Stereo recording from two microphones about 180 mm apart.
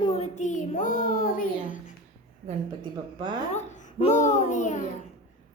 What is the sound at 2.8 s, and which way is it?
Speech, 25° right (ahead or behind).